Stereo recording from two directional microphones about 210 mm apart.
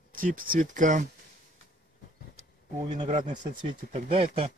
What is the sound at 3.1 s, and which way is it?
Speech, 35° right (ahead or behind).